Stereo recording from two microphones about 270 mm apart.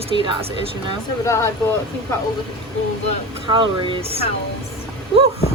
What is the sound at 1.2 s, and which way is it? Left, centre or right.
Speech, centre.